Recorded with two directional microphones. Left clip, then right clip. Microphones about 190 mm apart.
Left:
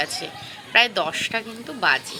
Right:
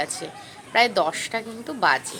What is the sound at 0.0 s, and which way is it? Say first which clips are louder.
A woman's voice: left 2 dB; 20° right (ahead or behind).